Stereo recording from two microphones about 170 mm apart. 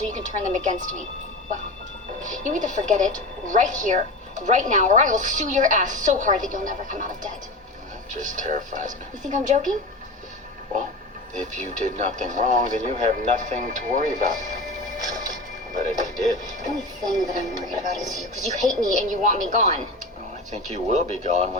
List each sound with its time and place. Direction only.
0.0 s a woman's voice: 45° right (ahead or behind)
2.2 s a woman's voice: 50° right (ahead or behind)
11.3 s a woman's voice: 45° right (ahead or behind)
15.7 s a woman's voice: 45° right (ahead or behind)
17.0 s speech: 20° right (ahead or behind)
18.0 s speech: centre (ahead or behind)
18.6 s a woman's voice: 50° right (ahead or behind)